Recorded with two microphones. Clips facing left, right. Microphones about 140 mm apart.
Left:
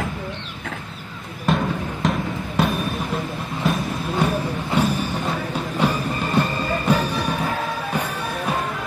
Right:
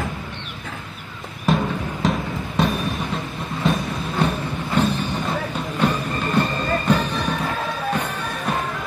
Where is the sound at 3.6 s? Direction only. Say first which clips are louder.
Right 1 dB; centre (ahead or behind).